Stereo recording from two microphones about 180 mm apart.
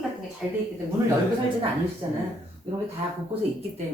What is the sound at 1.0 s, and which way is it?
Speech, 20° right (ahead or behind).